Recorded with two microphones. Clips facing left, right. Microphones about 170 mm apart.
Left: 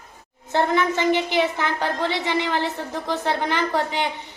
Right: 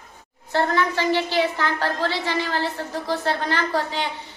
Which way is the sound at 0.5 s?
20° left (ahead or behind).